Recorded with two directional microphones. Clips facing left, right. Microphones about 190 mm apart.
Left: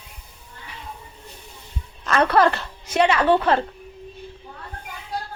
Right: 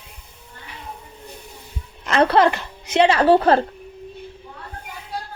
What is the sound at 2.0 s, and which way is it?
A child's voice, 25° right (ahead or behind).